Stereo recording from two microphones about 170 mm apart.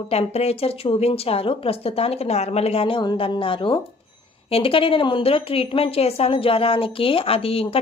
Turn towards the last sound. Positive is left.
turn(degrees=35)  # may be behind; listen again after turning